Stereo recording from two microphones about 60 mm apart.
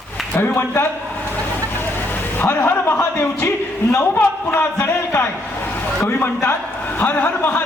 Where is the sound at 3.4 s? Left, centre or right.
Left.